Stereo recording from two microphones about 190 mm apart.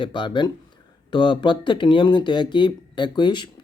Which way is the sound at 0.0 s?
25° left (ahead or behind).